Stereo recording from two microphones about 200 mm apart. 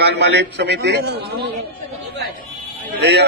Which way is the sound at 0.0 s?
55° right (ahead or behind).